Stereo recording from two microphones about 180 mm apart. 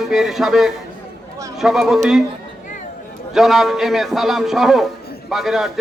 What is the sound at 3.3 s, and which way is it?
A man's voice, centre (ahead or behind).